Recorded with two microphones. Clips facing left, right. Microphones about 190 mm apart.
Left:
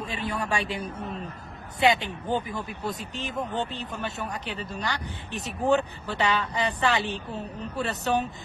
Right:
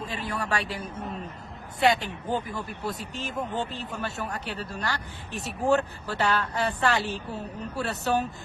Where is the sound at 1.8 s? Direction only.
20° left (ahead or behind).